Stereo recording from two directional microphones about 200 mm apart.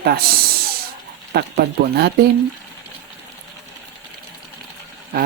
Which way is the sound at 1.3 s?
50° right (ahead or behind).